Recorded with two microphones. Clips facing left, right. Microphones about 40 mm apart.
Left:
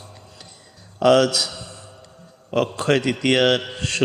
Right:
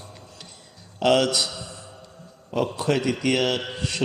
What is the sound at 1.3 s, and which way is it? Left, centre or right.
Mantra, centre.